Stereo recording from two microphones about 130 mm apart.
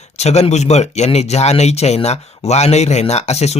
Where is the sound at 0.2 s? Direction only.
55° left (ahead or behind).